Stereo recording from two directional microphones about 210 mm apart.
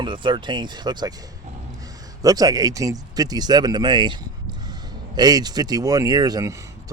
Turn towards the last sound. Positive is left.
turn(degrees=-15)  # may be behind; listen again after turning